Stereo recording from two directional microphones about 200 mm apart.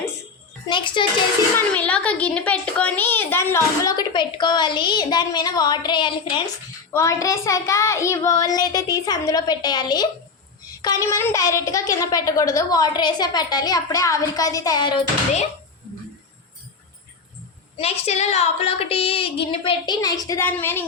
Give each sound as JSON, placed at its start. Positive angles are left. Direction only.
{"t": 1.0, "sound": "a child's voice", "side_deg": 25}
{"t": 1.5, "sound": "a child's voice", "side_deg": 5}
{"t": 17.7, "sound": "a child's voice", "side_deg": 30}